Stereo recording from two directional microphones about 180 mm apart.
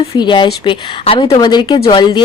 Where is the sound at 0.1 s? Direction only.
25° left (ahead or behind).